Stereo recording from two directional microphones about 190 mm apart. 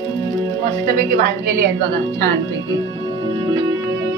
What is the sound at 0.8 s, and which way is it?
Speech, 50° right (ahead or behind).